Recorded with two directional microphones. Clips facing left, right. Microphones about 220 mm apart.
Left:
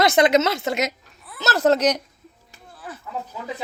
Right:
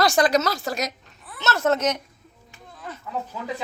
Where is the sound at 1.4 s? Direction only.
35° left (ahead or behind).